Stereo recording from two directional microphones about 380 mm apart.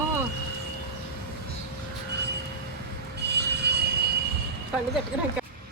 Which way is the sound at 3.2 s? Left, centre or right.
Right.